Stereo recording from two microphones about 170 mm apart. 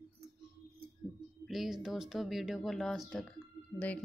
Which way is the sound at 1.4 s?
Centre (ahead or behind).